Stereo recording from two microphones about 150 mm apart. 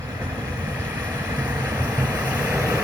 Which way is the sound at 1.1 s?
10° right (ahead or behind).